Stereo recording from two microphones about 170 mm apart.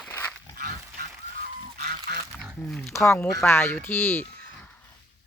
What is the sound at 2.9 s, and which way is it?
Speech, 15° left (ahead or behind).